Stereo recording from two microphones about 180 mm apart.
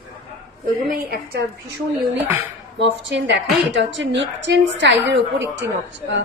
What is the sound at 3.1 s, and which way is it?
A woman's voice, 85° right.